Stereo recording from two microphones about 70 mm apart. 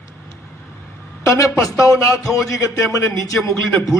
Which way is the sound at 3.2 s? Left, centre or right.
Left.